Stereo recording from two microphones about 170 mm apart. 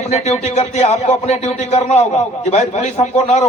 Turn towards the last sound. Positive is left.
turn(degrees=40)  # may be behind; listen again after turning